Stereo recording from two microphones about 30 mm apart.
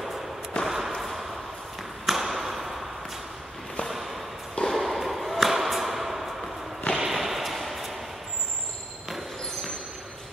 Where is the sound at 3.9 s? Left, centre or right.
Centre.